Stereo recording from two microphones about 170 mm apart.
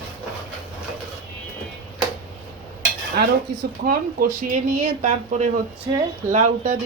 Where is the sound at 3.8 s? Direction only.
70° right (ahead or behind).